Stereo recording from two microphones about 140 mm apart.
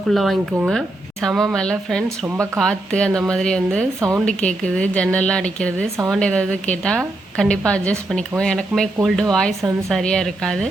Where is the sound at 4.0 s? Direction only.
20° right (ahead or behind).